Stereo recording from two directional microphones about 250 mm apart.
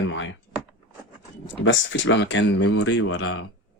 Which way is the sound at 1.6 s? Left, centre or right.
Left.